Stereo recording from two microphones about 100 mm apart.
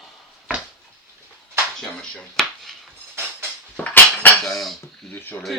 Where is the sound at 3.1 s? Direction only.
25° right (ahead or behind).